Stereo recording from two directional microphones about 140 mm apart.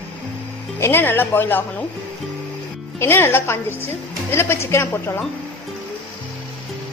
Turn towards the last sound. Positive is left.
turn(degrees=20)  # may be behind; listen again after turning